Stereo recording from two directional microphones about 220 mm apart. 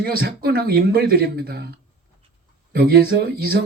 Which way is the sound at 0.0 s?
45° right (ahead or behind).